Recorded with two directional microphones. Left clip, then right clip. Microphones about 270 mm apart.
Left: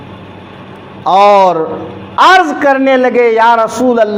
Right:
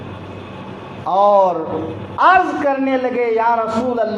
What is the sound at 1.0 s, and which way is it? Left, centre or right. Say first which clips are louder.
A man's voice: left 7 dB; left.